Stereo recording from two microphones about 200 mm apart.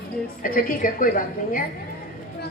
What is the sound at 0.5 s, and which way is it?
Speech, 45° left (ahead or behind).